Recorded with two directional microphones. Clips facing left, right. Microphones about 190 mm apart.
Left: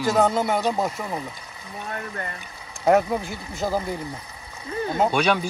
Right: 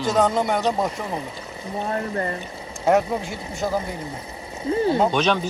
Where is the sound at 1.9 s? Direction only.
35° right (ahead or behind).